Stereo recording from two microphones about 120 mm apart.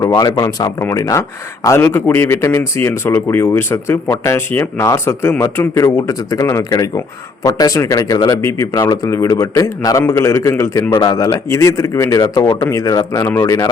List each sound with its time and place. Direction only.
0.0 s a man's voice: 25° left (ahead or behind)
10.9 s a man's voice: 35° left (ahead or behind)